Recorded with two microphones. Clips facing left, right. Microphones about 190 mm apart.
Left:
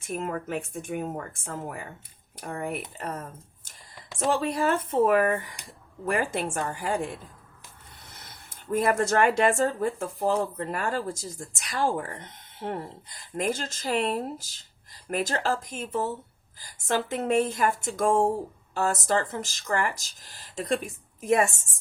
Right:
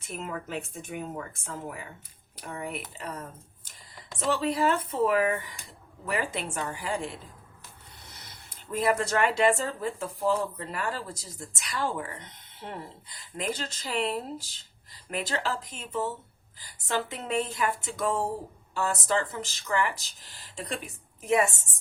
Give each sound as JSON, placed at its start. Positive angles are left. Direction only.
{"t": 0.0, "sound": "speech", "side_deg": 50}
{"t": 4.2, "sound": "speech", "side_deg": 45}